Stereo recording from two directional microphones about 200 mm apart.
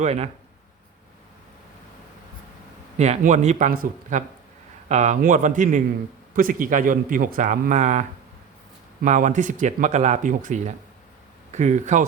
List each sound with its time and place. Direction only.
0.0 s speech: 30° right (ahead or behind)
3.0 s a man's voice: 35° right (ahead or behind)